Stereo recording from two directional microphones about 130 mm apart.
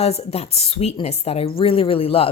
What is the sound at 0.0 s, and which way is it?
A woman's voice, 55° left (ahead or behind).